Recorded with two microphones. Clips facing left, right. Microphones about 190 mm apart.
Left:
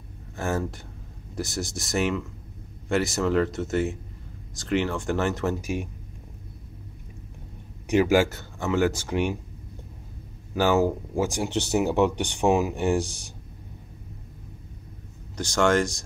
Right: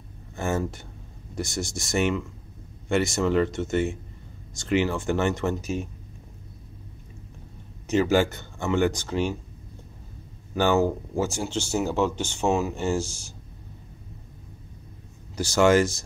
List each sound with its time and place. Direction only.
0.4 s speech: centre (ahead or behind)
7.8 s speech: 10° left (ahead or behind)
10.5 s speech: 5° left (ahead or behind)
15.3 s speech: 5° right (ahead or behind)